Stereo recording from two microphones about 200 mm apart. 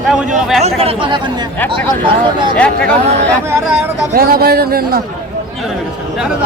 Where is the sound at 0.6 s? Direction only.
30° right (ahead or behind).